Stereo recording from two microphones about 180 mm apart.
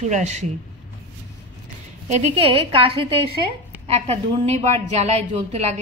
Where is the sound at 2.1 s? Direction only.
35° right (ahead or behind).